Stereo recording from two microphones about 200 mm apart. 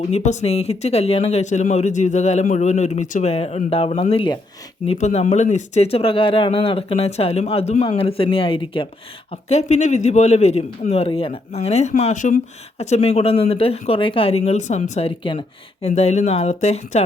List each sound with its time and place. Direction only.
0.1 s speech: 35° left (ahead or behind)